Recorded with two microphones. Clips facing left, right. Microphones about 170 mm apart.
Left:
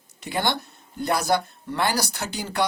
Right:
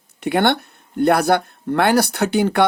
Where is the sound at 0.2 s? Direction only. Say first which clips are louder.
Right 9 dB; 60° right (ahead or behind).